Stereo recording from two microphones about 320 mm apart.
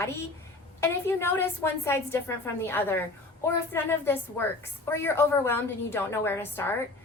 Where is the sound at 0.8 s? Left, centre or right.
Centre.